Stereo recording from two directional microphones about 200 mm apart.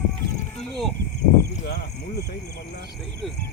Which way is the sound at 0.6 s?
Centre (ahead or behind).